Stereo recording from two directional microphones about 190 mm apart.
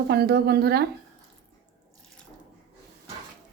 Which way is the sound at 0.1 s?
60° right (ahead or behind).